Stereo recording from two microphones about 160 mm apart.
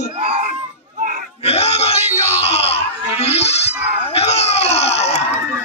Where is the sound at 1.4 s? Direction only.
40° left (ahead or behind).